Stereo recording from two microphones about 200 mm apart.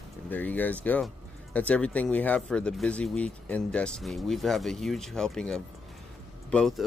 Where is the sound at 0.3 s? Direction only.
10° left (ahead or behind).